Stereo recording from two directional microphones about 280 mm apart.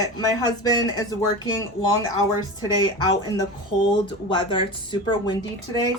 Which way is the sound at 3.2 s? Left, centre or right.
Centre.